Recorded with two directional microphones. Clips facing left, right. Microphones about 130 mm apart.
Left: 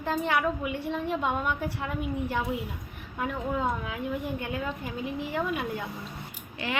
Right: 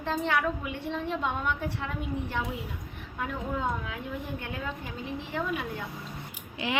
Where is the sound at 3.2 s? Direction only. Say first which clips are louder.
Left 3 dB; 5° left (ahead or behind).